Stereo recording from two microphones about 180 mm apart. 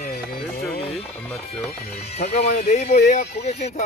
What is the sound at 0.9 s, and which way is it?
Music, centre (ahead or behind).